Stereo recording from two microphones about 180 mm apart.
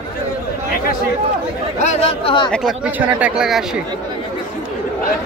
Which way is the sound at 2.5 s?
Centre (ahead or behind).